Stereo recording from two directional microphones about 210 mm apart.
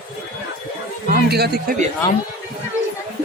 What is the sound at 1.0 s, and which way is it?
Speech, 45° right (ahead or behind).